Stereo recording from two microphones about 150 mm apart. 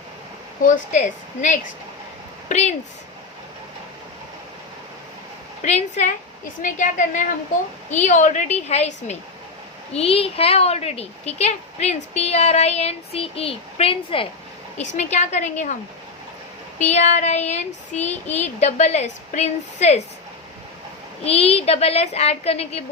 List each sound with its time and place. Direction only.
0.6 s a woman's voice: 55° left (ahead or behind)
5.6 s a woman's voice: 50° left (ahead or behind)
14.8 s a woman's voice: 50° left (ahead or behind)
21.2 s a woman's voice: 45° left (ahead or behind)